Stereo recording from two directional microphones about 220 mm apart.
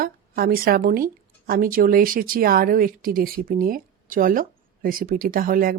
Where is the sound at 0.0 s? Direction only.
45° right (ahead or behind).